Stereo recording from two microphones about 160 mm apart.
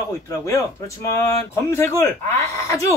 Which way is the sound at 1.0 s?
15° left (ahead or behind).